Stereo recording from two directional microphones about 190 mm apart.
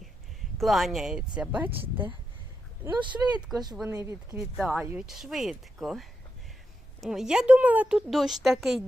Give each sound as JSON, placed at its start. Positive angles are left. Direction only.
{"t": 0.6, "sound": "a woman's voice", "side_deg": 0}
{"t": 3.1, "sound": "speech", "side_deg": -5}
{"t": 4.6, "sound": "a woman's voice", "side_deg": -5}